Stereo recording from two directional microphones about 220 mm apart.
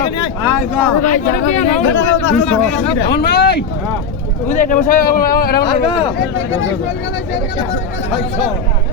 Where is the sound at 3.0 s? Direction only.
45° left (ahead or behind).